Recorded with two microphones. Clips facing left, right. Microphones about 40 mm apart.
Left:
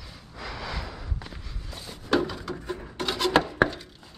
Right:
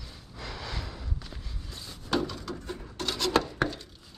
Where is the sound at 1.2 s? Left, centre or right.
Left.